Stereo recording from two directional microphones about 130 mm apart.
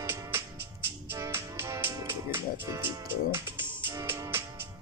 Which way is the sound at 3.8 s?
15° right (ahead or behind).